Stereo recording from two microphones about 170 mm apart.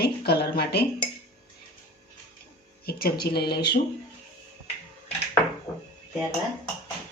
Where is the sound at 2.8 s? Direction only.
65° left (ahead or behind).